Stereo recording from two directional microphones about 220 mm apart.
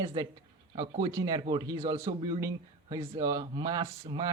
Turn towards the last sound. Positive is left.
turn(degrees=-20)  # may be behind; listen again after turning